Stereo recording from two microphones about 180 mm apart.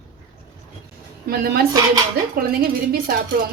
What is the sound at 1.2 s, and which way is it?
Speech, 55° right (ahead or behind).